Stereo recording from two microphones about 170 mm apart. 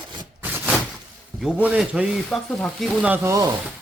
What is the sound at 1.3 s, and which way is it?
Sizzle, 5° right (ahead or behind).